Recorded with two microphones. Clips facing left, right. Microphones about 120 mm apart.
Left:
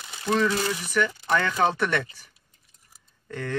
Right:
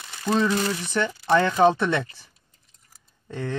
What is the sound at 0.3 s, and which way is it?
Speech, 25° right (ahead or behind).